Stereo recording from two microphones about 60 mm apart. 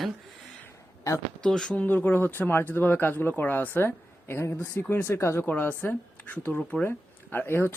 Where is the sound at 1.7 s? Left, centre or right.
Left.